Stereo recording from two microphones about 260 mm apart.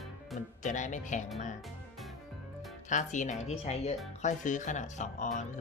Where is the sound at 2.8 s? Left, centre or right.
Left.